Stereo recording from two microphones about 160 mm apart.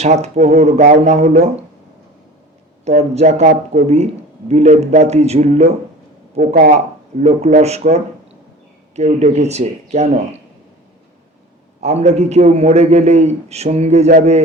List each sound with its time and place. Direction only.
0.0 s a man's voice: 45° right (ahead or behind)
3.0 s a man's voice: 45° right (ahead or behind)
6.3 s a man's voice: 65° right (ahead or behind); by 10.4 s 45° right (ahead or behind)
11.8 s a man's voice: 45° right (ahead or behind)